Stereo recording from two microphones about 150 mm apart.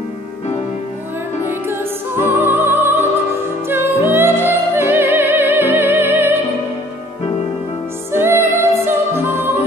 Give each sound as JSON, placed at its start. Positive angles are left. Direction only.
{"t": 1.5, "sound": "music", "side_deg": -15}
{"t": 8.1, "sound": "music", "side_deg": -15}